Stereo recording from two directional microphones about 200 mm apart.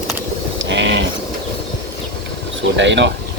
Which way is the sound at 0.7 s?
65° right (ahead or behind).